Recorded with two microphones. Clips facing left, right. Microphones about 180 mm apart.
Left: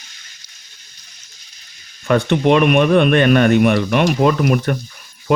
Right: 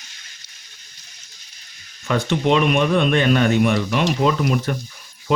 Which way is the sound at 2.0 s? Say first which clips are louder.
Left 5 dB; 60° left (ahead or behind).